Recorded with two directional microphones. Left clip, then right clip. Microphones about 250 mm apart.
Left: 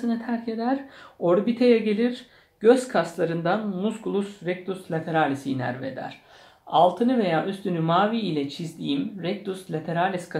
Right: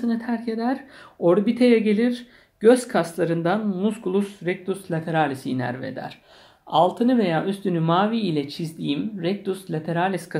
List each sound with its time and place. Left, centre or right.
0.0 s speech: right